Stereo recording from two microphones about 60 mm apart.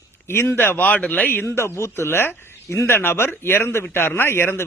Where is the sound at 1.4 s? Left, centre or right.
Left.